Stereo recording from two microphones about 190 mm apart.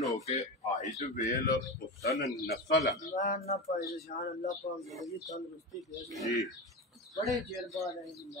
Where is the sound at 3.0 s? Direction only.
35° left (ahead or behind).